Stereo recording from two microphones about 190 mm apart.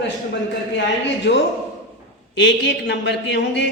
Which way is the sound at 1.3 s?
60° left (ahead or behind).